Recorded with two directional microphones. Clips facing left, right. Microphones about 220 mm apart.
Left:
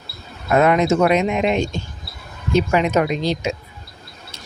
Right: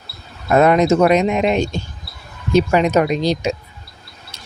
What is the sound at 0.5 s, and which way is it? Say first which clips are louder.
Speech: right 3 dB; 35° right (ahead or behind).